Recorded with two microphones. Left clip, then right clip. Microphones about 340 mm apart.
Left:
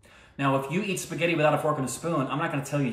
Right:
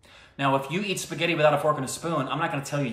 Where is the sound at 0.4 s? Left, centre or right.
Centre.